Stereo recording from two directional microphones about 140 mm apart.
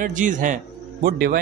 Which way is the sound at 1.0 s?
90° right.